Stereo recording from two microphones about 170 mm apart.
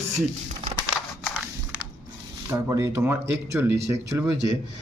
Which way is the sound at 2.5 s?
20° right (ahead or behind).